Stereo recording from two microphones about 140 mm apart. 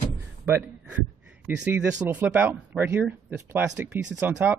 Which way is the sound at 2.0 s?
10° right (ahead or behind).